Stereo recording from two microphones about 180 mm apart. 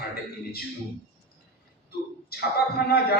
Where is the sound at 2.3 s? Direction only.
60° left (ahead or behind).